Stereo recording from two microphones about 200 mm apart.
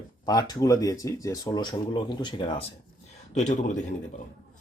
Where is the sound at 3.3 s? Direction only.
35° left (ahead or behind).